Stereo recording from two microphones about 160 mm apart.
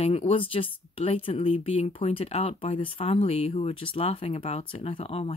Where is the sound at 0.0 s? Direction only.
35° left (ahead or behind).